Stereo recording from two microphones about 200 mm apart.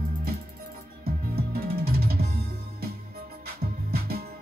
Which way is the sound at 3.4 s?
50° right (ahead or behind).